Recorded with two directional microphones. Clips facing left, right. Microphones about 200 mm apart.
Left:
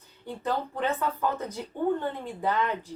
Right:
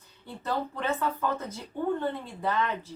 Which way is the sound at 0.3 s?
15° left (ahead or behind).